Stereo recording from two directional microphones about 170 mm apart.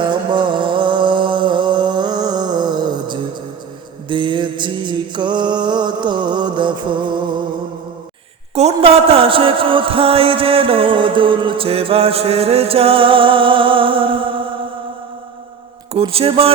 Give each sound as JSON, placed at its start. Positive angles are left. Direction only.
{"t": 0.0, "sound": "music", "side_deg": -25}
{"t": 4.1, "sound": "mantra", "side_deg": -30}
{"t": 8.5, "sound": "speech", "side_deg": -35}
{"t": 15.9, "sound": "speech", "side_deg": -35}